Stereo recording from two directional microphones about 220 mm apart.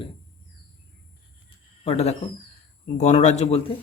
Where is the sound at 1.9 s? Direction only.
30° left (ahead or behind).